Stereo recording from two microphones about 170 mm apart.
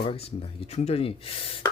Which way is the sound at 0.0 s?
35° left (ahead or behind).